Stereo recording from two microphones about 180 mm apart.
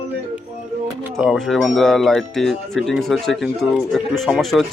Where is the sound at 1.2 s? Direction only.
5° right (ahead or behind).